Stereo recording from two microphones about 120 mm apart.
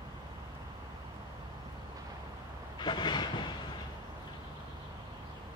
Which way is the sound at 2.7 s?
40° left (ahead or behind).